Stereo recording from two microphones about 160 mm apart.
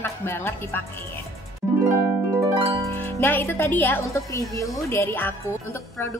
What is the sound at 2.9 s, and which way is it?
A woman's voice, 15° left (ahead or behind).